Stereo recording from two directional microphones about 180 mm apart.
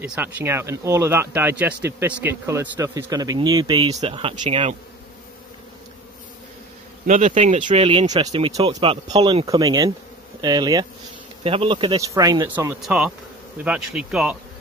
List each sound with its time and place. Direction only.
0.0 s speech: 10° right (ahead or behind); by 4.7 s 35° right (ahead or behind)
7.1 s speech: 40° right (ahead or behind)
8.1 s speech: 20° right (ahead or behind)
12.4 s speech: 10° right (ahead or behind)